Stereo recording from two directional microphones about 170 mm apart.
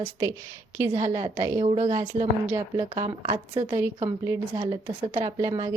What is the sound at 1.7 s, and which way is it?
Speech, 45° right (ahead or behind).